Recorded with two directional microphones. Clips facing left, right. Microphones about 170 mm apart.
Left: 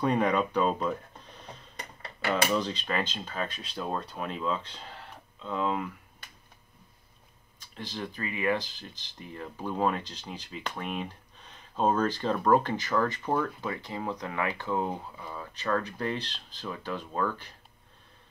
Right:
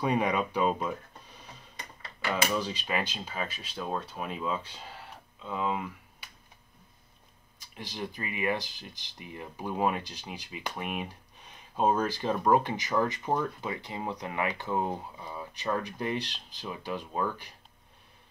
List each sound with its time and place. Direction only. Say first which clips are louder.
0.0 s speech: left 2 dB; 10° right (ahead or behind)
2.0 s dishes: left 2 dB; 60° left (ahead or behind)
2.5 s speech: left 2 dB; 10° right (ahead or behind)
7.5 s speech: left 2 dB; 10° right (ahead or behind)